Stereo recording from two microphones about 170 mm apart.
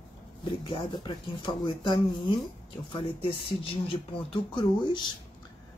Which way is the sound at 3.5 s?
30° left (ahead or behind).